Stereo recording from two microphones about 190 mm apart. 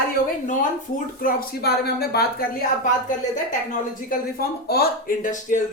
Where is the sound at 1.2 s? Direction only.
50° left (ahead or behind).